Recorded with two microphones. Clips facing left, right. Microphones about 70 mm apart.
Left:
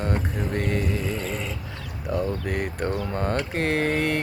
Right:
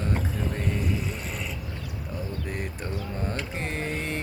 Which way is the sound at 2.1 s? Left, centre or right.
Left.